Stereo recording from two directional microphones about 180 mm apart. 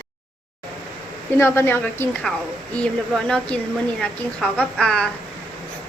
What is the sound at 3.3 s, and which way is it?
A woman's voice, 5° left (ahead or behind).